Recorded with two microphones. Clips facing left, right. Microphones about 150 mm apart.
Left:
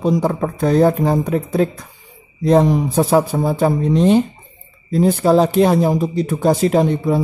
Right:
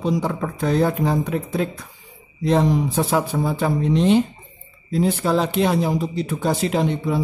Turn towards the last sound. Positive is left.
turn(degrees=45)  # may be behind; listen again after turning